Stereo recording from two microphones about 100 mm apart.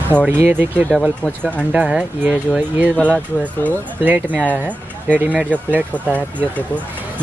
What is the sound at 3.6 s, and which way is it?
Speech, 15° left (ahead or behind).